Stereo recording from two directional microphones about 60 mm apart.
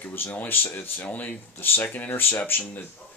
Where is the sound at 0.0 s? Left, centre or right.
Left.